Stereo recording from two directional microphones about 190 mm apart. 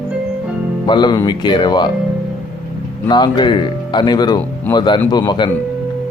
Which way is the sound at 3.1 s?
25° left (ahead or behind).